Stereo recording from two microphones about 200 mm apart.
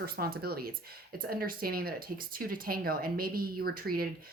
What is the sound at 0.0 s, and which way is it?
A woman's voice, 50° right (ahead or behind).